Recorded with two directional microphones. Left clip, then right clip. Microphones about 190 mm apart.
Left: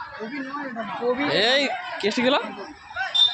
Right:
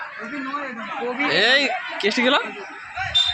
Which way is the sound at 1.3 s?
5° left (ahead or behind).